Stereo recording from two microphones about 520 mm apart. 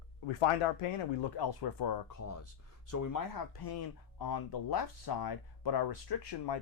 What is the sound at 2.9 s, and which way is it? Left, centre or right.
Speech, left.